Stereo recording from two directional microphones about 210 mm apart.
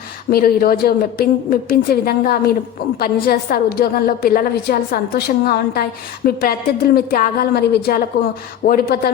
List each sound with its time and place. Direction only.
0.3 s a woman's voice: 45° left (ahead or behind)